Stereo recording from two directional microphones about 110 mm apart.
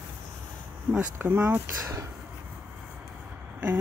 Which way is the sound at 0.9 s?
20° right (ahead or behind).